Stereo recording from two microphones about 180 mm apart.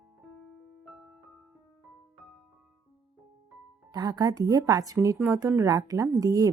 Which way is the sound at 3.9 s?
20° right (ahead or behind).